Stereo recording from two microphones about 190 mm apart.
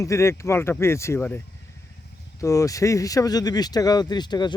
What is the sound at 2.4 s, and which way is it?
Speech, 15° left (ahead or behind).